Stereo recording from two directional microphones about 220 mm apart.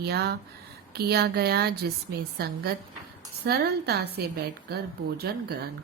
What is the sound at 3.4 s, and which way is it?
Speech, 45° right (ahead or behind).